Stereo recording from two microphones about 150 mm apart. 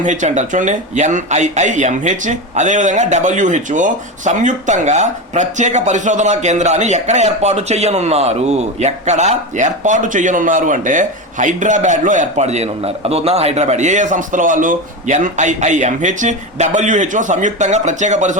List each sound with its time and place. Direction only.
0.0 s speech: 55° right (ahead or behind)